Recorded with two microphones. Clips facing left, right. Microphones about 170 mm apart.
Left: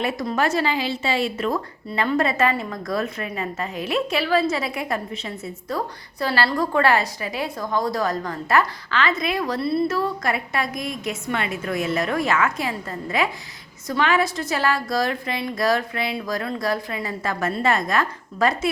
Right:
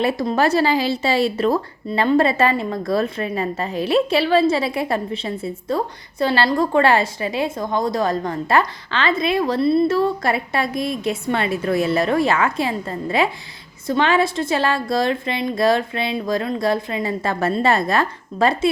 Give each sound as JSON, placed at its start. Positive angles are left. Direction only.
{"t": 0.0, "sound": "a woman's voice", "side_deg": -30}